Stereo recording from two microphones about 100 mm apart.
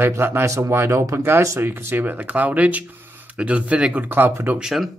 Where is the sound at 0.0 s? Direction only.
25° right (ahead or behind).